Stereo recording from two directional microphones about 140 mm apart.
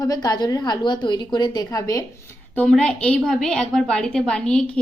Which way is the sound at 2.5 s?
10° left (ahead or behind).